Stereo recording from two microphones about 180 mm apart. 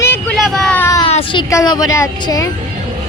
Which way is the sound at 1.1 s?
35° left (ahead or behind).